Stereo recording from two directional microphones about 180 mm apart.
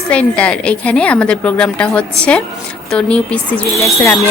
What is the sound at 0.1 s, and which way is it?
A woman's voice, 5° left (ahead or behind).